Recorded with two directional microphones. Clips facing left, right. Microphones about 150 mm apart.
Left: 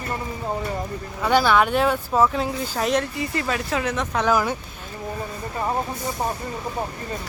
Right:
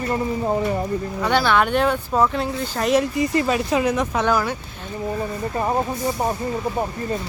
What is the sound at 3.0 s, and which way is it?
Speech, 20° right (ahead or behind).